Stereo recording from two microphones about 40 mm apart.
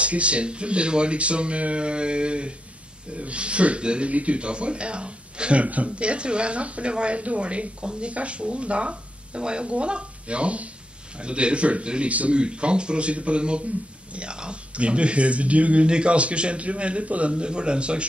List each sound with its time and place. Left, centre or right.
0.0 s speech: right
12.1 s speech: right
12.4 s speech: right